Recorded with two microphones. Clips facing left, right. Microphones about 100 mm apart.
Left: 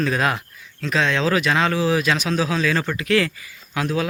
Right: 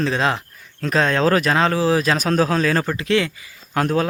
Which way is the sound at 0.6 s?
40° right (ahead or behind).